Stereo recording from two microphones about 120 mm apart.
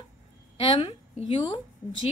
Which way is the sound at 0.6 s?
45° left (ahead or behind).